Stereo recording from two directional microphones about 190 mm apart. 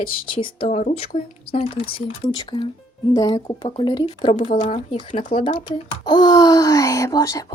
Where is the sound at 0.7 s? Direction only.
35° left (ahead or behind).